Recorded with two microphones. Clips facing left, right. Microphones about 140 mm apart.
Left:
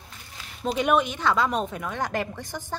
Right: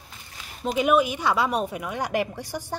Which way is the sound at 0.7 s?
5° right (ahead or behind).